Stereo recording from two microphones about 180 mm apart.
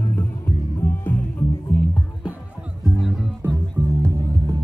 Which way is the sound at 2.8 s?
Centre (ahead or behind).